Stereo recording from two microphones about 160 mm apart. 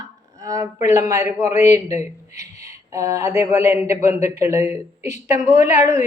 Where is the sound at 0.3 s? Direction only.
20° right (ahead or behind).